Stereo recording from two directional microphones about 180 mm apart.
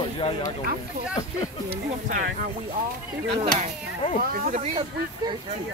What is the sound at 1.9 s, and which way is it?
Speech, 45° right (ahead or behind).